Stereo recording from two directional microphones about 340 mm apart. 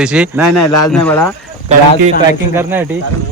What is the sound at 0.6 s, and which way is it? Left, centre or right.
Speech, left.